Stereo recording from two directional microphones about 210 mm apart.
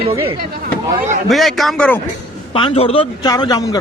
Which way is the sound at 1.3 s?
Centre (ahead or behind).